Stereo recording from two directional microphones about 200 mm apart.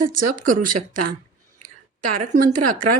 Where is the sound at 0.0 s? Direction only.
40° right (ahead or behind).